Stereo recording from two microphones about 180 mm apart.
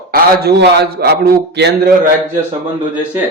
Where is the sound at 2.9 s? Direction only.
10° right (ahead or behind).